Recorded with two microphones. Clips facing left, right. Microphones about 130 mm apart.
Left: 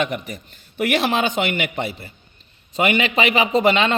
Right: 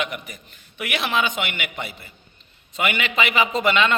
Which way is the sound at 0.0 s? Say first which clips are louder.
Left 5 dB; 35° left (ahead or behind).